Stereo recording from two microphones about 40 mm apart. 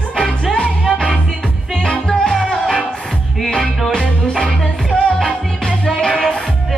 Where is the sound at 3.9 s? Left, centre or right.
Left.